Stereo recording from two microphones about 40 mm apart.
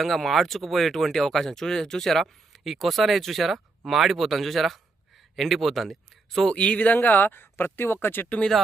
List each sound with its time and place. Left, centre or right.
0.0 s speech: centre
6.5 s speech: left
6.7 s speech: left
8.0 s speech: left